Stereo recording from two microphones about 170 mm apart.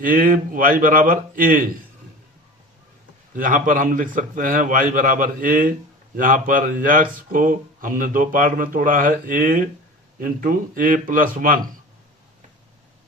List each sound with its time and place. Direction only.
0.0 s speech: 55° right (ahead or behind)
3.3 s speech: 50° right (ahead or behind)